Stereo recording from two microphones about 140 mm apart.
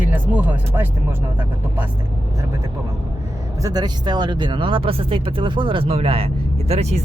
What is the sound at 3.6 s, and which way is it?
Speech, 30° right (ahead or behind).